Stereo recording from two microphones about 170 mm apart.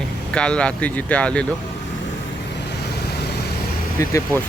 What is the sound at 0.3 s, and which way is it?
Speech, 5° left (ahead or behind).